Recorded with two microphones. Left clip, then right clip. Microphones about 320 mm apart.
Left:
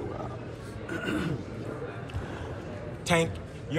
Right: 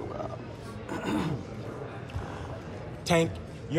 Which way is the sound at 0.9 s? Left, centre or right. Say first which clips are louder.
Even; right.